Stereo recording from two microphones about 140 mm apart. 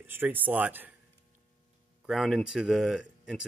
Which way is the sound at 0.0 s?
15° right (ahead or behind).